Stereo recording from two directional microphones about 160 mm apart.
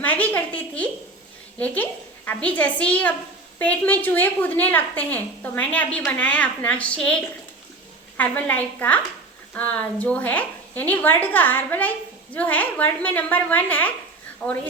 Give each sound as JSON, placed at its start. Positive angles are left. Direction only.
{"t": 0.0, "sound": "a woman's voice", "side_deg": 10}